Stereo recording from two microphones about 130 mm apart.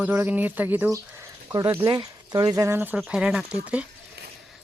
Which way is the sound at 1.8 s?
35° right (ahead or behind).